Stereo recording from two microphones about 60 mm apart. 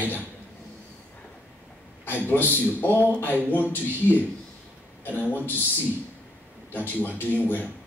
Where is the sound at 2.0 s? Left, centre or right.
Left.